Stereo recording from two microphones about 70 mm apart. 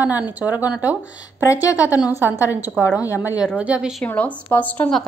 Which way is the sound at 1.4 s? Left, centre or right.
Left.